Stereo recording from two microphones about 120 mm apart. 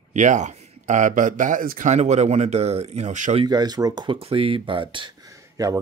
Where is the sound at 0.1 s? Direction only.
85° right.